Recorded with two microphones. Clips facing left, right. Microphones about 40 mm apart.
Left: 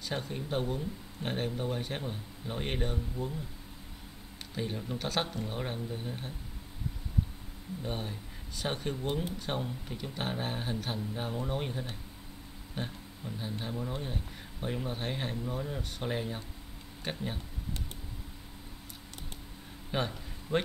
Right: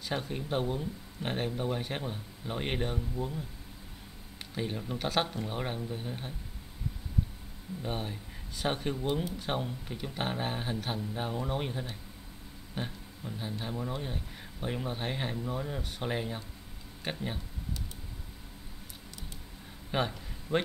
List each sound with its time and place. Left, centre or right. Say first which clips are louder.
0.1 s speech: right 2 dB; centre
4.6 s speech: right 1 dB; centre
7.8 s speech: right 2 dB; centre
19.9 s a man's voice: right 2 dB; centre
20.5 s speech: right 1 dB; left